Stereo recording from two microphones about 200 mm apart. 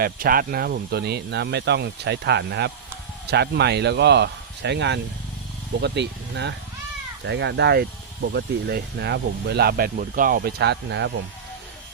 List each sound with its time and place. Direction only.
0.0 s speech: 45° right (ahead or behind)